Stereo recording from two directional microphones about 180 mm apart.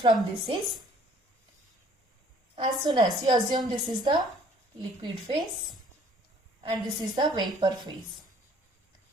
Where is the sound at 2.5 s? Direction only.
25° right (ahead or behind).